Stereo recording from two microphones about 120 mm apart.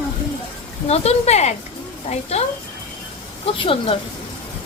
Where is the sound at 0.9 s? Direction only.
60° left (ahead or behind).